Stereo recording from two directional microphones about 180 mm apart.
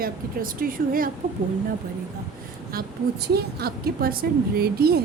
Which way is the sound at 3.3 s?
60° right (ahead or behind).